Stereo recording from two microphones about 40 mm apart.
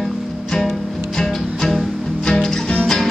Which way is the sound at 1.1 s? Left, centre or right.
Centre.